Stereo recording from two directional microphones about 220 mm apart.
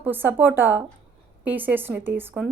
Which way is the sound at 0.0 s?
10° right (ahead or behind).